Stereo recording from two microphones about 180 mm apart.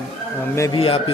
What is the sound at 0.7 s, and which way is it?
Speech, 30° left (ahead or behind).